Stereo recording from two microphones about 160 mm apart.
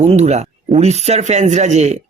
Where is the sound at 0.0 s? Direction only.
45° right (ahead or behind).